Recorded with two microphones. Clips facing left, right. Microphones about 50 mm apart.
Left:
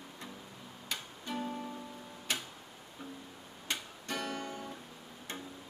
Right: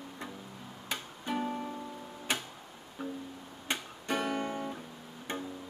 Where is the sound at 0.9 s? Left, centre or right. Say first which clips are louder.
Right 4 dB; right.